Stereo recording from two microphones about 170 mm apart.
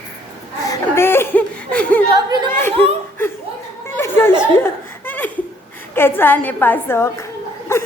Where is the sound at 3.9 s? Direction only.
15° left (ahead or behind).